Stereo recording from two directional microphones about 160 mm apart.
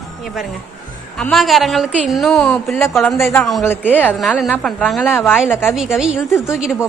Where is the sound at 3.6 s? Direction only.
10° left (ahead or behind).